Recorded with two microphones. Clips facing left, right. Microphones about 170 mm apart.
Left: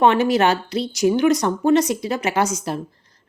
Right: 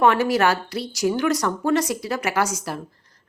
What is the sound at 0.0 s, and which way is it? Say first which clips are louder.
A woman's voice: left 2 dB; 20° left (ahead or behind).